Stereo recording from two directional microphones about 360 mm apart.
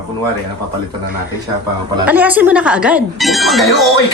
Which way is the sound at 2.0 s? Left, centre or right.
Centre.